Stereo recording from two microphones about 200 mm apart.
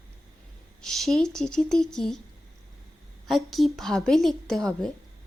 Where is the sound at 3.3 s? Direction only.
Centre (ahead or behind).